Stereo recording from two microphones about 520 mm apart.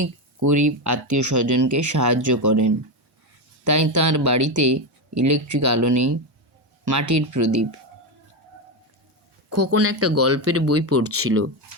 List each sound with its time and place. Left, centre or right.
0.0 s speech: right
9.5 s speech: right